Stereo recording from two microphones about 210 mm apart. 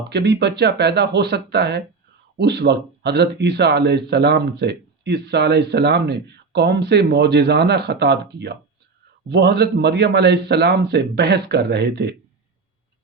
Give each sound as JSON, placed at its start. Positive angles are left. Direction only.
{"t": 0.1, "sound": "speech", "side_deg": -55}